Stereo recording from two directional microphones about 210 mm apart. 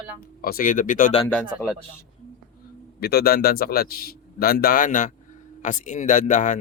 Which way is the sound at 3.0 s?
50° left (ahead or behind).